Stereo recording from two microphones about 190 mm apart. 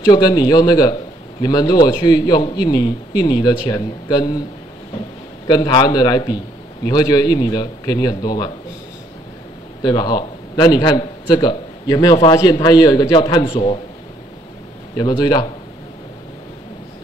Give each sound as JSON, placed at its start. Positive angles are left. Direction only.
{"t": 0.0, "sound": "a man's voice", "side_deg": 20}
{"t": 5.5, "sound": "a man's voice", "side_deg": 20}
{"t": 9.8, "sound": "a man's voice", "side_deg": 25}
{"t": 15.0, "sound": "a man's voice", "side_deg": 20}